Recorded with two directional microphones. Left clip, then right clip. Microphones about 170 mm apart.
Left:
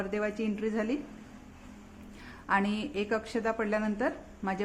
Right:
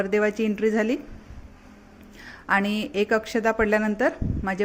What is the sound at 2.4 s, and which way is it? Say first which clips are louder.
A woman's voice: right 6 dB; 25° right (ahead or behind).